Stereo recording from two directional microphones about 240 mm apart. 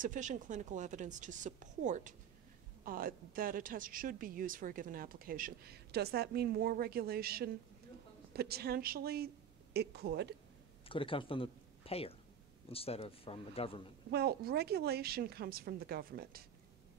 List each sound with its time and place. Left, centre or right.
0.0 s a woman's voice: right
10.9 s a man's voice: left
14.1 s a woman's voice: right